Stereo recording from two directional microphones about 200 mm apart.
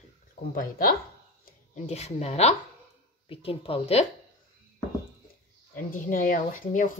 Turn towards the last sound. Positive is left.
turn(degrees=40)  # may be behind; listen again after turning